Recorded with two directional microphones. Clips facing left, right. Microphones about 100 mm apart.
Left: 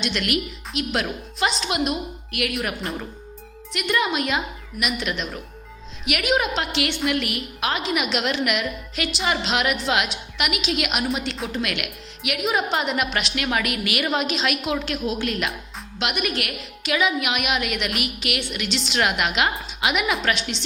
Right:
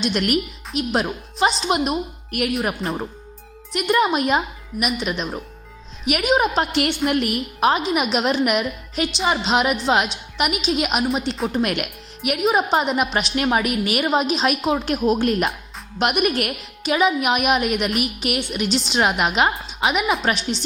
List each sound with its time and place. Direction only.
0.0 s a woman's voice: 40° right (ahead or behind)